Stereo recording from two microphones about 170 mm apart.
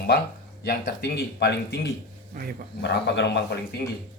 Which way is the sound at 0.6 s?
60° left (ahead or behind).